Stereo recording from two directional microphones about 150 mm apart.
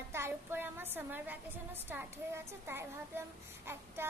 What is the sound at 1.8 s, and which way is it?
A child's voice, 15° right (ahead or behind).